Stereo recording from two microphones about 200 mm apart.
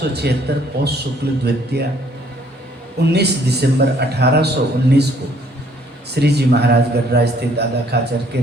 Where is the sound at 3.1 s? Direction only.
55° right (ahead or behind).